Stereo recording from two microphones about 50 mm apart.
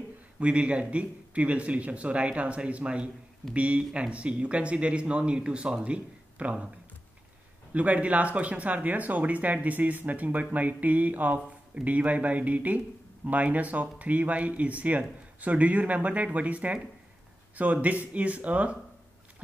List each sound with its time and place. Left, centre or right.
0.4 s speech: right
7.7 s speech: right
17.8 s speech: right